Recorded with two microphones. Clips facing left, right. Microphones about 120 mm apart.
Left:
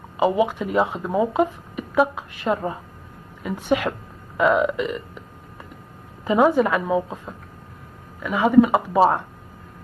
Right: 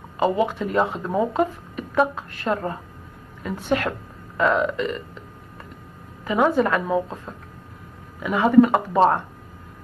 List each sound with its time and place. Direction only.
0.2 s speech: 10° left (ahead or behind)
6.2 s a woman's voice: 20° left (ahead or behind)
6.5 s speech: 10° left (ahead or behind)